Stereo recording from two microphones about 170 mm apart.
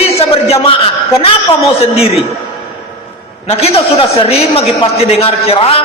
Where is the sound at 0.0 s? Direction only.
35° left (ahead or behind).